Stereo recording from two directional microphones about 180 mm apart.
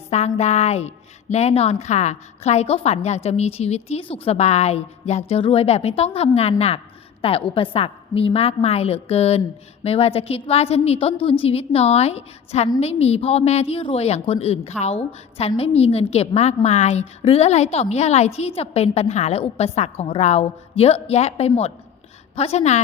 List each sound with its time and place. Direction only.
0.1 s a woman's voice: 40° left (ahead or behind)